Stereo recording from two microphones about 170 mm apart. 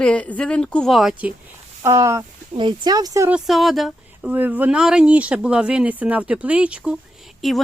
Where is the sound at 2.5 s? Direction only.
30° right (ahead or behind).